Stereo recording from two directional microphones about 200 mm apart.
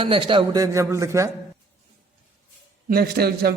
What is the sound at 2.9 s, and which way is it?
Speech, 50° right (ahead or behind).